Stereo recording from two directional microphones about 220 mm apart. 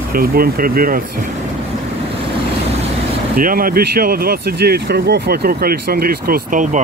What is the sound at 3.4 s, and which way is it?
Speech, 40° right (ahead or behind).